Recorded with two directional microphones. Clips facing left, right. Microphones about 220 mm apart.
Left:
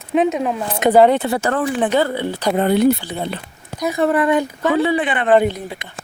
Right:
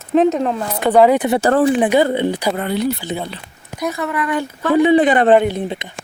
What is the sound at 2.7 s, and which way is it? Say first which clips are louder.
Speech: left 7 dB; 55° left (ahead or behind).